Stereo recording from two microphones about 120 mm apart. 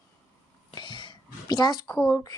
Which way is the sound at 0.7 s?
40° left (ahead or behind).